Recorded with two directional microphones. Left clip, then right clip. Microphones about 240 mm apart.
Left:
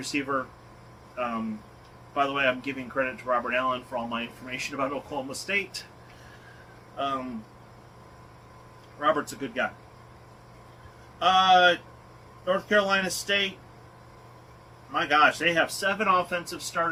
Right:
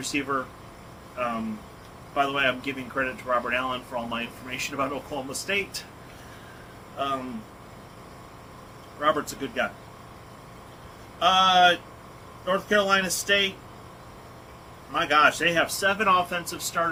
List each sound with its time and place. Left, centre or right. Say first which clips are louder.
0.0 s speech: right 1 dB; centre
2.1 s speech: right 1 dB; centre
6.9 s speech: right 1 dB; centre
9.0 s speech: right 1 dB; centre
11.2 s speech: right 1 dB; centre
14.9 s speech: right 1 dB; centre